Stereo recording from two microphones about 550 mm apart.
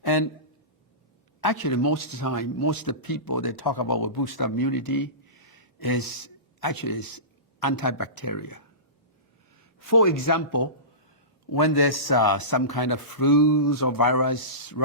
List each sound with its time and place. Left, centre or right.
0.0 s a sound: left
1.4 s a man's voice: left
9.8 s a man's voice: left